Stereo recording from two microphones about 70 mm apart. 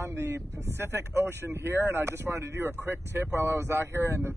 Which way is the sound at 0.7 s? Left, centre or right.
Right.